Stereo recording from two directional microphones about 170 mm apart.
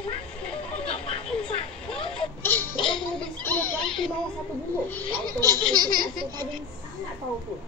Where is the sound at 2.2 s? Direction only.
10° left (ahead or behind).